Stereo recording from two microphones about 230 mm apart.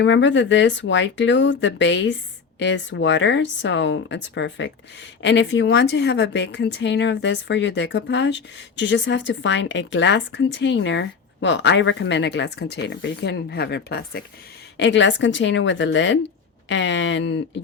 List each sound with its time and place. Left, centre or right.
0.0 s speech: left